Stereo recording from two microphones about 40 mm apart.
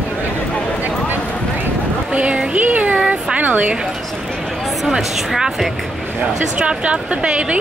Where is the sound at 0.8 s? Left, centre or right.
Right.